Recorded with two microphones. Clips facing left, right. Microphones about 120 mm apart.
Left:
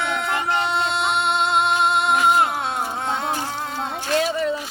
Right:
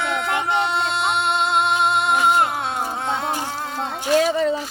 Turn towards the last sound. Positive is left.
turn(degrees=-40)  # may be behind; listen again after turning